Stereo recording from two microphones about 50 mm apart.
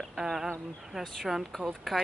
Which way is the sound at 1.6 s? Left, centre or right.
Right.